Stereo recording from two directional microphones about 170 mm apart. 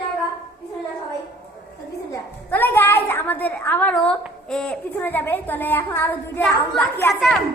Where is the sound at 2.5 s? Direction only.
10° left (ahead or behind).